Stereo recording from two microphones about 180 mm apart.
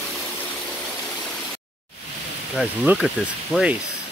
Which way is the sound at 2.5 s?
5° right (ahead or behind).